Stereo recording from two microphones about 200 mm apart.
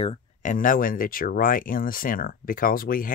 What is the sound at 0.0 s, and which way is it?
Speech, 35° left (ahead or behind).